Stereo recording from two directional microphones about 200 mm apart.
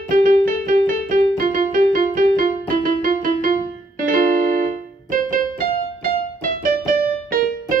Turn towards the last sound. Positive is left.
turn(degrees=-45)  # may be behind; listen again after turning